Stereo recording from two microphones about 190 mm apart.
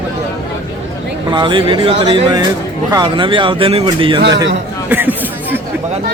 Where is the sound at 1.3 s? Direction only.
25° right (ahead or behind).